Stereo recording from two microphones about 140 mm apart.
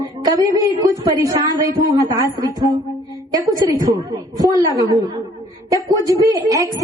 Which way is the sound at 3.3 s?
25° right (ahead or behind).